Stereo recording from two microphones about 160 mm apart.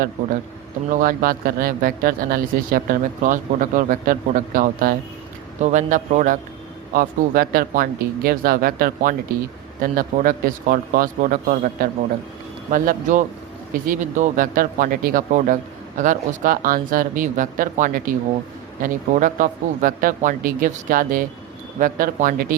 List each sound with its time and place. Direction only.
0.9 s a man's voice: 65° right (ahead or behind)
5.6 s a man's voice: 50° right (ahead or behind)
6.9 s a man's voice: 65° right (ahead or behind)